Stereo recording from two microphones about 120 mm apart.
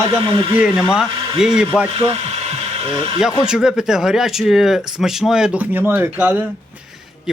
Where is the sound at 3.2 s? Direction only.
5° right (ahead or behind).